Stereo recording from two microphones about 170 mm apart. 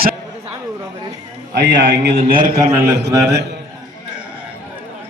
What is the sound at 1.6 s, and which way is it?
Speech, 90° right.